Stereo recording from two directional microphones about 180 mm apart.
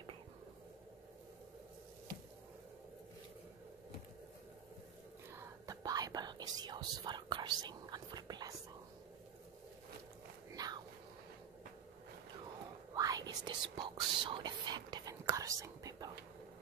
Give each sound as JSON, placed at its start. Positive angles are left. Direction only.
{"t": 5.3, "sound": "whispering", "side_deg": -20}
{"t": 10.5, "sound": "a sound", "side_deg": -20}
{"t": 12.9, "sound": "whispering", "side_deg": -20}